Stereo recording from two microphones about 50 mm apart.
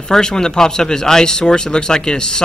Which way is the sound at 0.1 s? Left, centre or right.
Centre.